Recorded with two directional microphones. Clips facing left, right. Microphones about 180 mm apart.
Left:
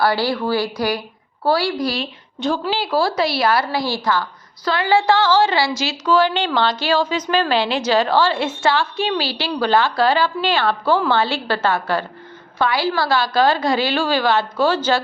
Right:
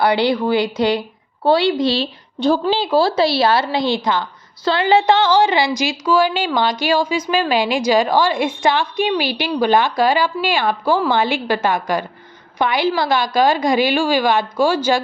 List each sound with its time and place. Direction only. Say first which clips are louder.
0.0 s a woman's voice: right 3 dB; 20° right (ahead or behind)